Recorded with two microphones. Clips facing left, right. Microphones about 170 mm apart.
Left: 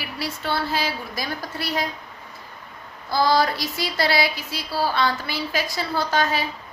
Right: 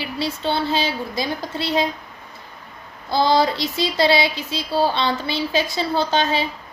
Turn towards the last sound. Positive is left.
turn(degrees=-25)  # may be behind; listen again after turning